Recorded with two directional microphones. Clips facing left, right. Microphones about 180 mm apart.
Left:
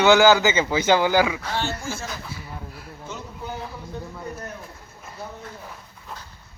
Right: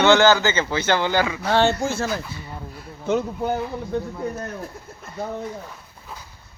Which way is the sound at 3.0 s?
60° right (ahead or behind).